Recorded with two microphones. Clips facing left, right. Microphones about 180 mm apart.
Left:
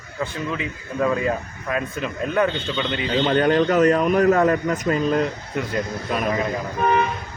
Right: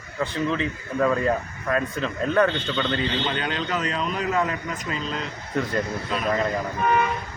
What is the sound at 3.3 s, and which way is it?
A man's voice, 50° left (ahead or behind).